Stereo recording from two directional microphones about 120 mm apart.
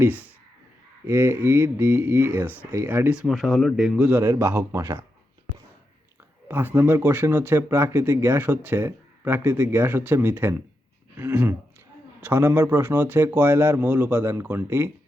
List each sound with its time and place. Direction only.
0.0 s speech: 15° right (ahead or behind)
4.2 s speech: 20° right (ahead or behind)
6.5 s speech: 15° right (ahead or behind)